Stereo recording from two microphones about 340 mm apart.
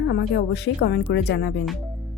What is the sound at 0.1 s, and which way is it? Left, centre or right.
A woman's voice, left.